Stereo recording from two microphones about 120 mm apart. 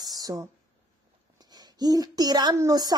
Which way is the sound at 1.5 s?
35° right (ahead or behind).